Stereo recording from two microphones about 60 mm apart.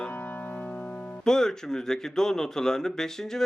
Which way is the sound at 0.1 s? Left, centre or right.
Left.